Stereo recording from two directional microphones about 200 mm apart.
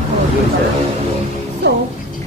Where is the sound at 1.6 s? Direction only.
60° right (ahead or behind).